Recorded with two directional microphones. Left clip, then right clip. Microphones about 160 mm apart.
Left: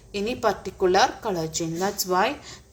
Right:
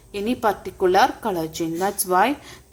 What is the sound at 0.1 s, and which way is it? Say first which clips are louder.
A woman's voice: right 2 dB; 30° right (ahead or behind).